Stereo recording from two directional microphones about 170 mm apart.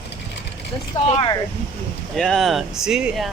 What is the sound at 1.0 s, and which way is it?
Speech, 35° left (ahead or behind).